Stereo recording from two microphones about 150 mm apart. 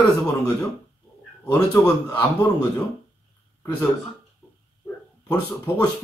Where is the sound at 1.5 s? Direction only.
10° left (ahead or behind).